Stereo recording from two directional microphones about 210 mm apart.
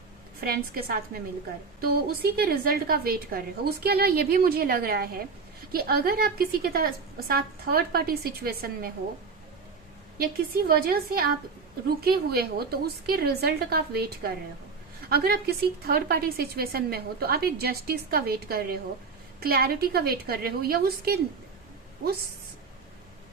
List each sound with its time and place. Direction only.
0.4 s a woman's voice: 45° right (ahead or behind)
10.2 s a woman's voice: 45° right (ahead or behind)